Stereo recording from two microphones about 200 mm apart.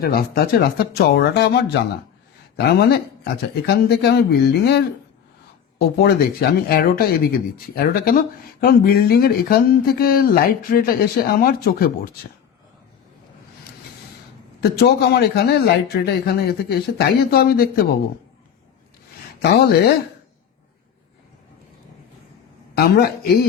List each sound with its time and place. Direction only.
0.0 s speech: 50° left (ahead or behind)
6.0 s speech: 55° left (ahead or behind)
14.6 s speech: 55° left (ahead or behind)
19.4 s speech: 55° left (ahead or behind)
22.7 s speech: 50° left (ahead or behind)